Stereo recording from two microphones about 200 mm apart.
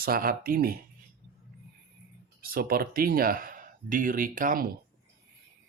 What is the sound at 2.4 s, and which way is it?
Speech, 45° right (ahead or behind).